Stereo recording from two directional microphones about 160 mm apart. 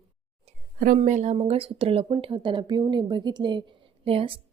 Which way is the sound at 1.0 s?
45° right (ahead or behind).